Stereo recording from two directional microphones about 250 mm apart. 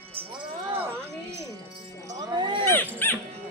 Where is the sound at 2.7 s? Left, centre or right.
Centre.